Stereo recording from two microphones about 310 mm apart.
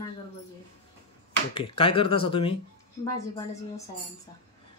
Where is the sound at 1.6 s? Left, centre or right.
Centre.